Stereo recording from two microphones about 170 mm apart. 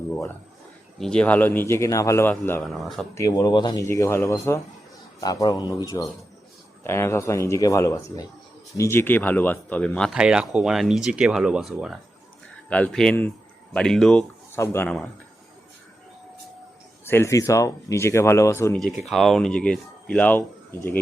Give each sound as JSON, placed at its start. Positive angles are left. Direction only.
{"t": 0.9, "sound": "speech", "side_deg": 5}
{"t": 3.2, "sound": "a man's voice", "side_deg": 20}
{"t": 12.6, "sound": "speech", "side_deg": 10}
{"t": 17.1, "sound": "speech", "side_deg": 15}
{"t": 19.0, "sound": "speech", "side_deg": 0}